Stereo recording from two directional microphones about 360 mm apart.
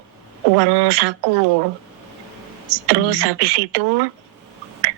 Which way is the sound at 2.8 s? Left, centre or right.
Right.